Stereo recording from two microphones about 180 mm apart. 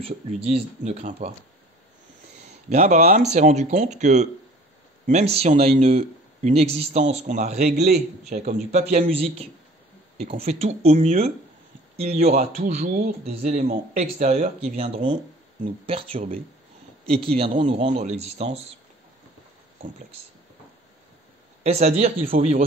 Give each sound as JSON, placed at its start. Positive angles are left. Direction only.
{"t": 0.0, "sound": "speech", "side_deg": -35}
{"t": 2.7, "sound": "speech", "side_deg": -40}
{"t": 21.6, "sound": "speech", "side_deg": -35}